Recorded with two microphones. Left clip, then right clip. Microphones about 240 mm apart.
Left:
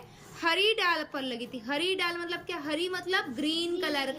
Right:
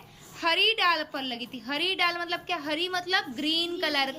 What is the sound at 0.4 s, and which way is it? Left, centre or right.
A woman's voice, centre.